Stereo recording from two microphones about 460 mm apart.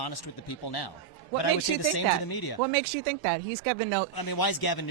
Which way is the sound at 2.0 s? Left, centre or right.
Left.